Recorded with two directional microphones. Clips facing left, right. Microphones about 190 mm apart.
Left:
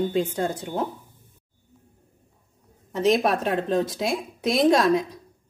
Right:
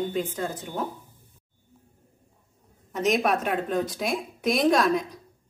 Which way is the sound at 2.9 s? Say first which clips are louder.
Left 3 dB; 30° left (ahead or behind).